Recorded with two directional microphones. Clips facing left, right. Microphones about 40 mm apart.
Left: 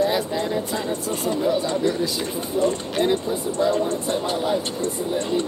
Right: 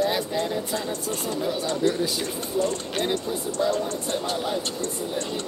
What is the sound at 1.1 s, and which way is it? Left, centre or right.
Speech, centre.